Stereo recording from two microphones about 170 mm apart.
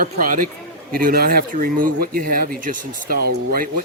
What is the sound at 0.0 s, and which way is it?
A man's voice, 50° right (ahead or behind).